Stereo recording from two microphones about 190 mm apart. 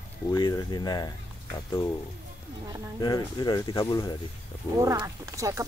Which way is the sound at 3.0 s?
20° left (ahead or behind).